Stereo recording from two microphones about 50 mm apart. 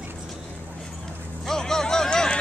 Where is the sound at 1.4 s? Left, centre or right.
Centre.